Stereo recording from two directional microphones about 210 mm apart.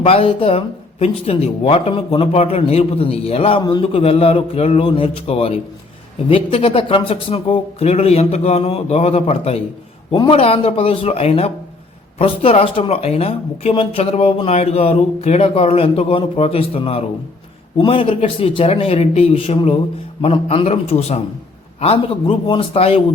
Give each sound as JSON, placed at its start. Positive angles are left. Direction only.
{"t": 0.0, "sound": "speech", "side_deg": 30}